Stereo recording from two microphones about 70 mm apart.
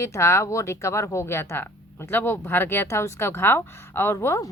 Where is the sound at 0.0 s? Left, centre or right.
Left.